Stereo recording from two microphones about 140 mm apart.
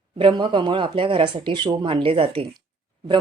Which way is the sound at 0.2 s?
35° right (ahead or behind).